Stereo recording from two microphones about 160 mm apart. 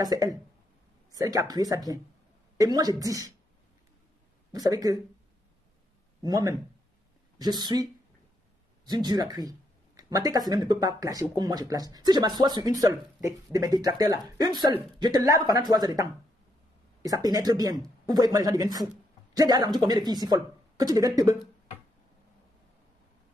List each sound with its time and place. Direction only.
0.0 s speech: 25° right (ahead or behind)
4.5 s speech: 25° right (ahead or behind)
6.2 s speech: 25° right (ahead or behind)